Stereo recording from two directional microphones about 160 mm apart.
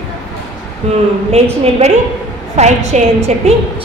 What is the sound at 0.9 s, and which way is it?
A woman's voice, 40° right (ahead or behind).